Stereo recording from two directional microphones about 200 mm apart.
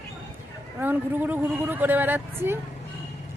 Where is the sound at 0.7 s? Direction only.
10° right (ahead or behind).